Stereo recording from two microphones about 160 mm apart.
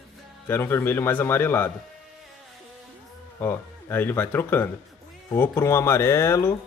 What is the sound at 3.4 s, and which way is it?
A man's voice, 15° left (ahead or behind).